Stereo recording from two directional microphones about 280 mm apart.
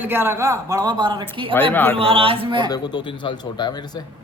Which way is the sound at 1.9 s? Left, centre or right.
Centre.